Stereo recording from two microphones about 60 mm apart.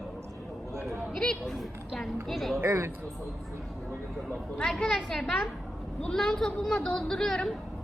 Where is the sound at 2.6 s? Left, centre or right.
Right.